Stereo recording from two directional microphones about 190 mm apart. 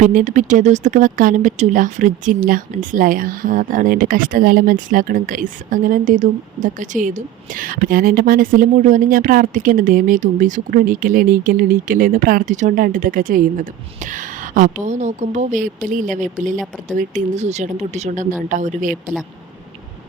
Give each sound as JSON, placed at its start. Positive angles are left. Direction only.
{"t": 0.0, "sound": "speech", "side_deg": -45}